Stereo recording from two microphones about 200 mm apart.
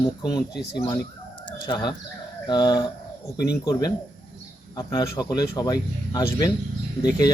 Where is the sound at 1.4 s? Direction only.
20° left (ahead or behind).